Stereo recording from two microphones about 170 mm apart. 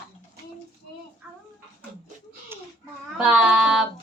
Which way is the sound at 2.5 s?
15° right (ahead or behind).